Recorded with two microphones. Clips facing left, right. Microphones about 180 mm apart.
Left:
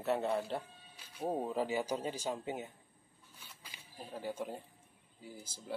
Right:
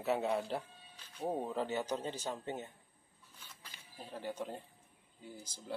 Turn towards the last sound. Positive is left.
turn(degrees=5)  # may be behind; listen again after turning